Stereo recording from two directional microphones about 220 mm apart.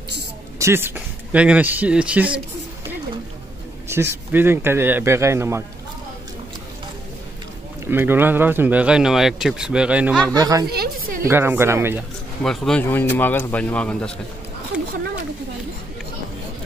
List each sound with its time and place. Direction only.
0.6 s speech: 10° right (ahead or behind)
3.9 s speech: 10° right (ahead or behind)
7.8 s speech: 10° right (ahead or behind)
10.3 s speech: 15° right (ahead or behind)
10.7 s a sound: 45° right (ahead or behind)
11.2 s speech: 10° right (ahead or behind)
12.4 s speech: centre (ahead or behind)
14.7 s a sound: 5° right (ahead or behind)